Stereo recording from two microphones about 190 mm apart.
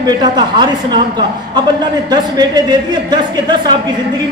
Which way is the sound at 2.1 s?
20° right (ahead or behind).